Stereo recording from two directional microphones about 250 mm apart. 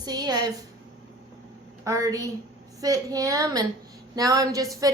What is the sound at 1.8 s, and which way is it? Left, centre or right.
A woman's voice, centre.